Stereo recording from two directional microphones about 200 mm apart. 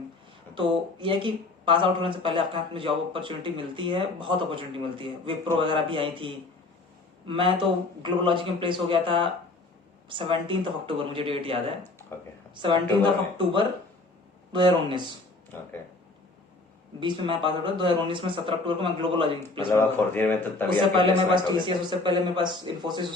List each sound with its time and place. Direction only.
0.5 s speech: 25° right (ahead or behind)
14.5 s speech: 25° right (ahead or behind)
17.0 s speech: 25° right (ahead or behind)
19.7 s speech: 10° left (ahead or behind)
21.0 s speech: 25° right (ahead or behind)